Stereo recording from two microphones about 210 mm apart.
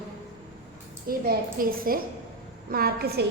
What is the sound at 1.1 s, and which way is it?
A woman's voice, 45° right (ahead or behind).